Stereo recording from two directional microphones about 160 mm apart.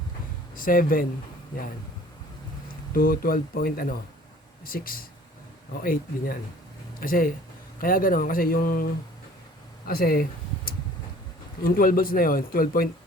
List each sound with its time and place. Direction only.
0.5 s speech: 60° left (ahead or behind)
2.9 s speech: 65° left (ahead or behind)
11.6 s speech: 65° left (ahead or behind)